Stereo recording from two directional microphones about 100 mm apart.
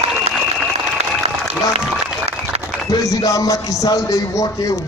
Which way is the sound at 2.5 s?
90° right.